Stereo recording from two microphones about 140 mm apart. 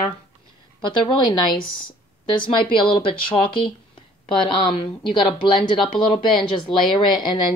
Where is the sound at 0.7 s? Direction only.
30° left (ahead or behind).